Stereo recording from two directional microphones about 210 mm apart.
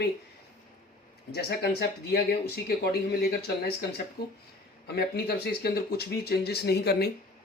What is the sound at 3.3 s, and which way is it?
Speech, 50° left (ahead or behind).